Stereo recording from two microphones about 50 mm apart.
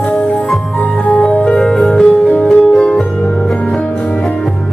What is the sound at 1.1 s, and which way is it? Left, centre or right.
Music, left.